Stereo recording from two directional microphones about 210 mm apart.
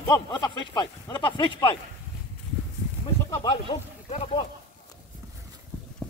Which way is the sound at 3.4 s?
30° left (ahead or behind).